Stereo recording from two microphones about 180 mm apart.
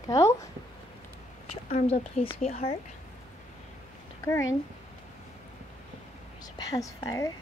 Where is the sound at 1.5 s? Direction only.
35° left (ahead or behind).